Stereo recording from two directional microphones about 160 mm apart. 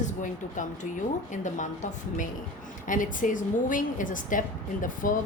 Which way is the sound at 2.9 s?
55° left (ahead or behind).